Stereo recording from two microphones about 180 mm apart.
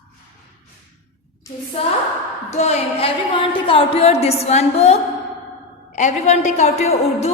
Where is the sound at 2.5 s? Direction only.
35° left (ahead or behind).